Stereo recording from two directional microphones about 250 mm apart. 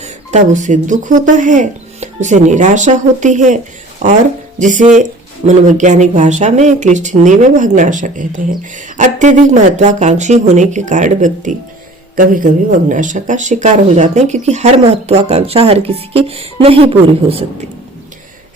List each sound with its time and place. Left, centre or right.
0.0 s speech: right